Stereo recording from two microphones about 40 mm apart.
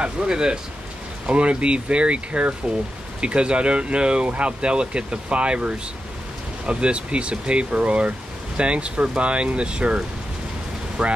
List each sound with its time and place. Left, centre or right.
0.0 s speech: centre